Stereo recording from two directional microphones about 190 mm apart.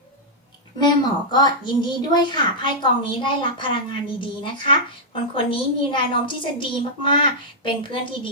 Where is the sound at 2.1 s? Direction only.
25° left (ahead or behind).